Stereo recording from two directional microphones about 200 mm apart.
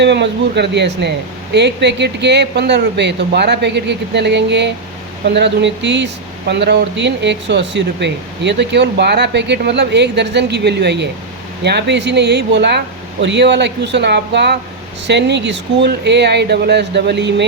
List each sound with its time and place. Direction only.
0.0 s speech: 60° right (ahead or behind)